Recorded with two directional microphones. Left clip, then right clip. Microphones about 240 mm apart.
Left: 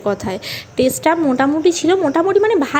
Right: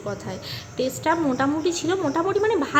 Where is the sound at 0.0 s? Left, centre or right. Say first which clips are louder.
Left 11 dB; left.